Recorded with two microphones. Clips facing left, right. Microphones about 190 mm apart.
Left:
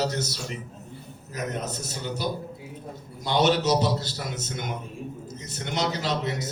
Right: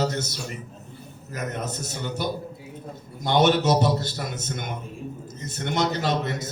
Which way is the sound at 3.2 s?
55° right (ahead or behind).